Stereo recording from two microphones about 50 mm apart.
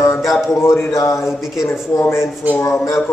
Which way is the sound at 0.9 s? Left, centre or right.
Left.